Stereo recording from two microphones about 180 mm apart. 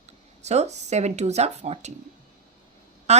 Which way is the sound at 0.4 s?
40° right (ahead or behind).